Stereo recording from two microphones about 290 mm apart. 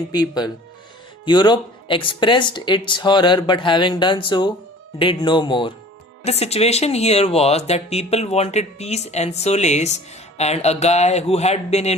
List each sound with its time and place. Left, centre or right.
0.1 s speech: centre